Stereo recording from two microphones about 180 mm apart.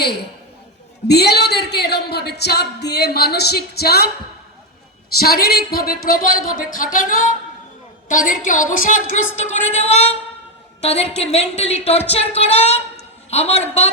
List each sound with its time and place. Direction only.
0.0 s a woman's voice: 65° left (ahead or behind)
5.1 s a woman's voice: 55° left (ahead or behind); by 13.9 s 35° left (ahead or behind)